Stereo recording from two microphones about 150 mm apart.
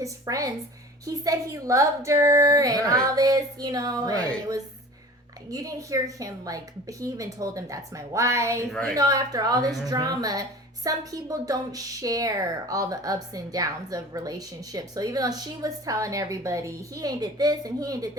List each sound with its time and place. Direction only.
0.0 s a woman's voice: 20° right (ahead or behind)
5.5 s a woman's voice: 25° right (ahead or behind)
8.7 s a woman's voice: 5° left (ahead or behind)
9.0 s a woman's voice: 25° right (ahead or behind)